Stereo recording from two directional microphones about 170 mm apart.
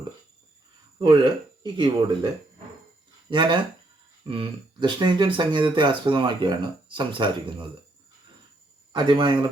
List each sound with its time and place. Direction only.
0.9 s speech: 30° right (ahead or behind)
8.9 s speech: 25° right (ahead or behind)